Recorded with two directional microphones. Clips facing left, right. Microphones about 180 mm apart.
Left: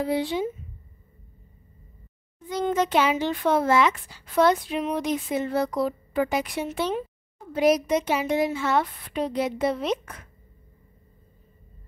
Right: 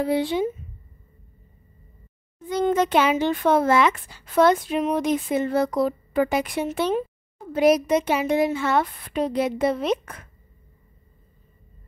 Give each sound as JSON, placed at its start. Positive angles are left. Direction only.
{"t": 0.0, "sound": "a woman's voice", "side_deg": -55}
{"t": 2.4, "sound": "a child's voice", "side_deg": -50}